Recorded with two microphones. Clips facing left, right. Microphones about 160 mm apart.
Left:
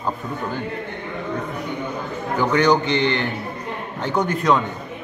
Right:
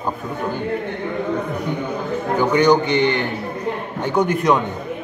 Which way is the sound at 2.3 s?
15° right (ahead or behind).